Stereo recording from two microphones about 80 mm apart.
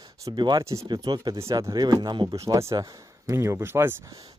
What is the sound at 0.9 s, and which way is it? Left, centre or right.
Speech, right.